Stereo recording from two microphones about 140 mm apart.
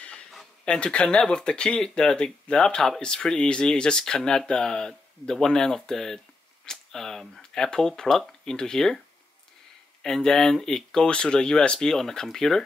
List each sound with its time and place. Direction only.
0.0 s speech: 5° left (ahead or behind)
10.0 s speech: 5° left (ahead or behind)